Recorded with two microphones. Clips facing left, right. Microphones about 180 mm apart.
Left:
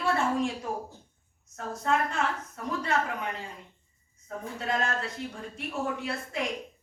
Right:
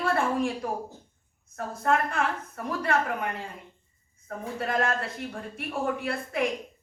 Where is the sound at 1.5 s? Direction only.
55° right (ahead or behind).